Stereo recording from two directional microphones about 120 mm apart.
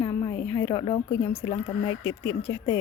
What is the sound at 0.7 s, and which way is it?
Speech, 40° left (ahead or behind).